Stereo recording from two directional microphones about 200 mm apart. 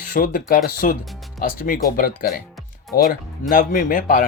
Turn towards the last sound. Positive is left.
turn(degrees=45)  # may be behind; listen again after turning